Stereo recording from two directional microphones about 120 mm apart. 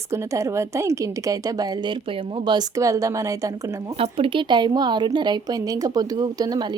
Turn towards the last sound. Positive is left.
turn(degrees=-35)  # may be behind; listen again after turning